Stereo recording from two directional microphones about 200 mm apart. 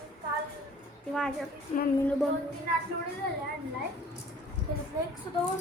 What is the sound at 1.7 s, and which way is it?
Speech, 30° left (ahead or behind).